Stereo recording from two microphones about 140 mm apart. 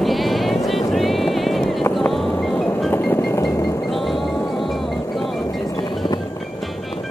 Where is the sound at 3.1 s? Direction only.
15° left (ahead or behind).